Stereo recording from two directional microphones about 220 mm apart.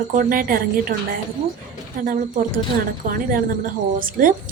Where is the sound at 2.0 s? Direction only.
40° right (ahead or behind).